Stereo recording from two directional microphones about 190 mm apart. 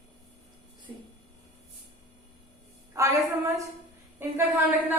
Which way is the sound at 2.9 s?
15° right (ahead or behind).